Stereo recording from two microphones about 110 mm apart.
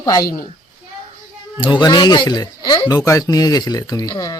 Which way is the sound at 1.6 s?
40° left (ahead or behind).